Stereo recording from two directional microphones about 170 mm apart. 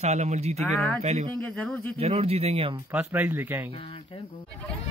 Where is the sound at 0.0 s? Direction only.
40° right (ahead or behind).